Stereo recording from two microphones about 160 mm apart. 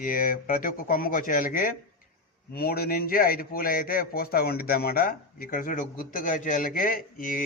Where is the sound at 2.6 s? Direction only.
70° left (ahead or behind).